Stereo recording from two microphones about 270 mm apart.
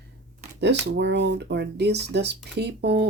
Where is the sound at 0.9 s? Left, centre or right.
Right.